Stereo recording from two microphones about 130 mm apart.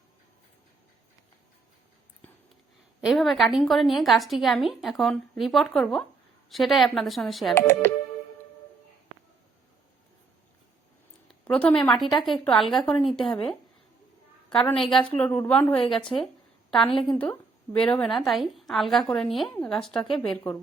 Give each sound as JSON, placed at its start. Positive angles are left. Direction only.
{"t": 3.0, "sound": "a woman's voice", "side_deg": 0}
{"t": 7.5, "sound": "a woman's voice", "side_deg": 20}
{"t": 11.3, "sound": "a woman's voice", "side_deg": 10}
{"t": 14.5, "sound": "a woman's voice", "side_deg": 5}
{"t": 20.1, "sound": "speech", "side_deg": 40}
{"t": 20.3, "sound": "a woman's voice", "side_deg": 10}